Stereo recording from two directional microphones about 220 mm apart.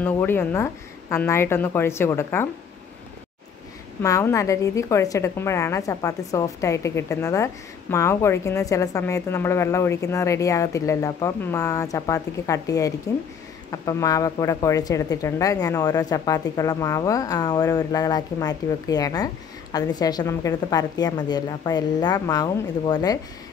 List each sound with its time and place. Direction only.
0.0 s a woman's voice: 10° left (ahead or behind)
4.0 s a woman's voice: 15° left (ahead or behind)